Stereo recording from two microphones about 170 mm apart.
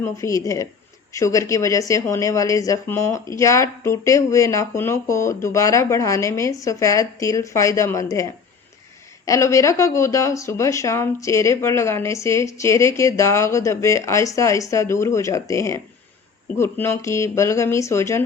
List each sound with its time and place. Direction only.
0.0 s speech: 20° left (ahead or behind)